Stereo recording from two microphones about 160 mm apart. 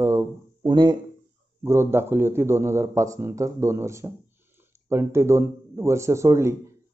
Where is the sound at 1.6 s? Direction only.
15° right (ahead or behind).